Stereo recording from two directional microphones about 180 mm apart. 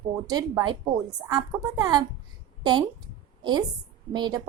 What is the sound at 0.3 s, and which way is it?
A woman's voice, 20° right (ahead or behind).